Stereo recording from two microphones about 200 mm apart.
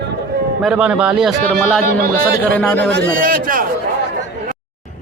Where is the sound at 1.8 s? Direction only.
45° right (ahead or behind).